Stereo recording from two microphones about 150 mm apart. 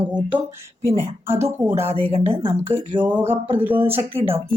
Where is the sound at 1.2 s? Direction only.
15° right (ahead or behind).